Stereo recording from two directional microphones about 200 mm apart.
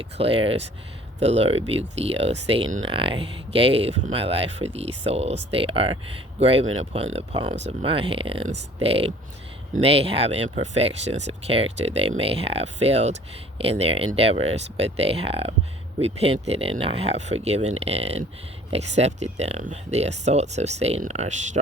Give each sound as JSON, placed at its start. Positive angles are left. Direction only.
{"t": 0.0, "sound": "speech", "side_deg": -30}
{"t": 2.8, "sound": "speech", "side_deg": -25}